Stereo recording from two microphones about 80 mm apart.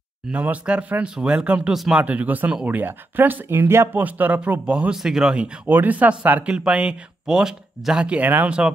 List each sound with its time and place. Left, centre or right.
0.3 s speech: centre
4.0 s speech: centre
5.7 s speech: right